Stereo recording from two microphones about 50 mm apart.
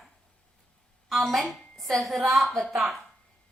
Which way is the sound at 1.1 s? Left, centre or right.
Centre.